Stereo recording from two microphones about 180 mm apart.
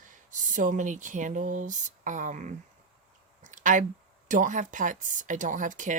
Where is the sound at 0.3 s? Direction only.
45° right (ahead or behind).